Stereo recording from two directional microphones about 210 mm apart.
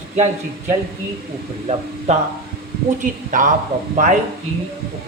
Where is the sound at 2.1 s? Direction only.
30° right (ahead or behind).